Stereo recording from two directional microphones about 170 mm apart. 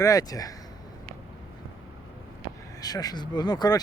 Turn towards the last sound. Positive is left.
turn(degrees=25)  # may be behind; listen again after turning